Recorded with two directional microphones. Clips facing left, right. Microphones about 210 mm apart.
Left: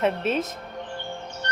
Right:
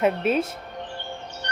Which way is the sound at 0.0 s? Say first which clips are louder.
Right 2 dB; 10° right (ahead or behind).